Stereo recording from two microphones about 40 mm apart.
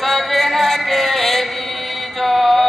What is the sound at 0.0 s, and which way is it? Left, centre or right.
Chant, centre.